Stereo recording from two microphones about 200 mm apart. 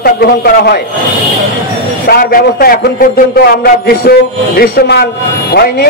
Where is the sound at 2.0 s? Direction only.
50° left (ahead or behind).